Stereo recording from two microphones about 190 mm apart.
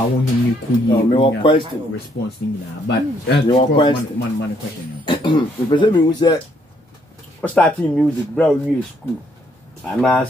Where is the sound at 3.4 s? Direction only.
25° left (ahead or behind).